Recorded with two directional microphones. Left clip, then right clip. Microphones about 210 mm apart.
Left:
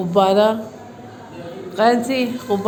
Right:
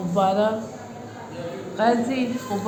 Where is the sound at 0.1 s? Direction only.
50° left (ahead or behind).